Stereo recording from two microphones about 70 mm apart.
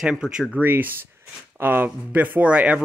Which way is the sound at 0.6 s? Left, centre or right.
Right.